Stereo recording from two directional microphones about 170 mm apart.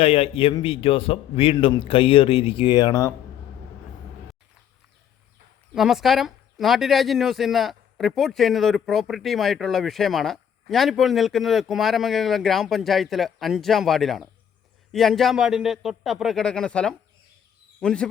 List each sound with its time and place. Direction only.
0.0 s speech: 35° left (ahead or behind)
5.7 s speech: centre (ahead or behind)